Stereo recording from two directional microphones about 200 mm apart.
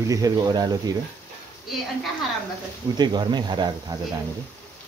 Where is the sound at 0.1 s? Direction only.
20° right (ahead or behind).